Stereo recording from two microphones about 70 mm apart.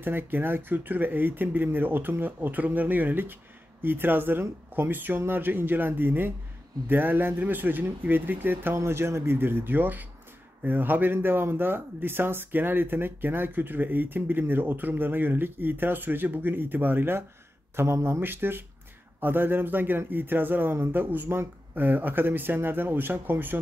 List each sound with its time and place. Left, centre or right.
0.0 s speech: right